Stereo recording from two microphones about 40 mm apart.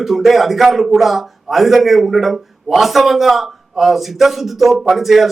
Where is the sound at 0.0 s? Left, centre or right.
Centre.